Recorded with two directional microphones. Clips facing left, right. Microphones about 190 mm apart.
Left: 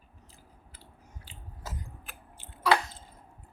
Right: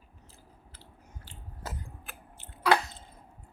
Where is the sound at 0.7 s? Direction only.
15° left (ahead or behind).